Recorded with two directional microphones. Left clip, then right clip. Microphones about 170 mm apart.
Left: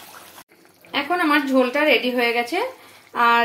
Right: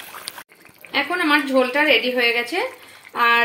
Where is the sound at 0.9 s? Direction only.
10° left (ahead or behind).